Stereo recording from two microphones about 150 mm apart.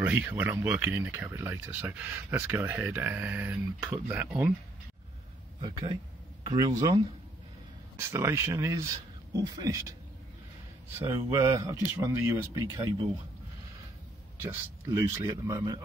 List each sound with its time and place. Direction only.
0.0 s speech: 10° right (ahead or behind)
5.6 s a man's voice: 30° right (ahead or behind)
8.1 s speech: 20° right (ahead or behind)
11.1 s speech: 20° right (ahead or behind)
14.4 s speech: 20° right (ahead or behind)